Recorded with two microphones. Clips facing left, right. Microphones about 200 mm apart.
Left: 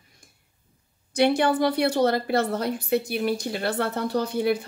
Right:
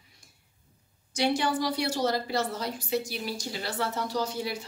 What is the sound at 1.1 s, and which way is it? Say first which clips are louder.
A woman's voice: left 6 dB; 55° left (ahead or behind).